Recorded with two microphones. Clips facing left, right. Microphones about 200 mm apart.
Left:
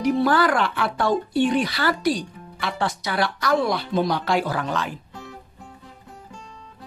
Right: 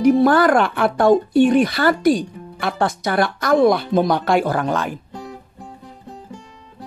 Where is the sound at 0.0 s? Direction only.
50° right (ahead or behind).